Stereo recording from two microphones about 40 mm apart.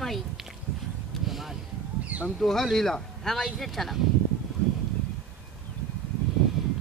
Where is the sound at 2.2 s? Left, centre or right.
Centre.